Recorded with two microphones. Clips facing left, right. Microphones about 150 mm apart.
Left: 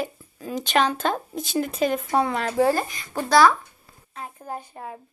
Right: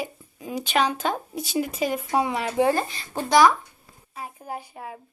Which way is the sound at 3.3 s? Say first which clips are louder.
Even; 15° right (ahead or behind).